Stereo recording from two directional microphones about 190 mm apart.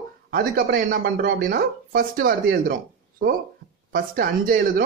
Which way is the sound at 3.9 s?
50° right (ahead or behind).